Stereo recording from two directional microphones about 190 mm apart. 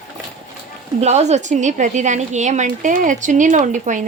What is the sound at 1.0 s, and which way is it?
A woman's voice, 35° right (ahead or behind).